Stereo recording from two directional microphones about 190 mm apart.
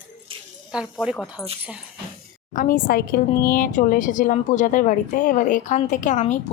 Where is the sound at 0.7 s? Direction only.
5° right (ahead or behind).